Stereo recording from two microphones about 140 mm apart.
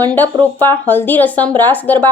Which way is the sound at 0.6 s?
15° left (ahead or behind).